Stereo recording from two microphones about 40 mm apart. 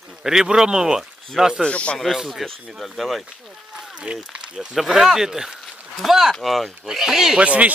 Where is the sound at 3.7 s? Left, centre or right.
Right.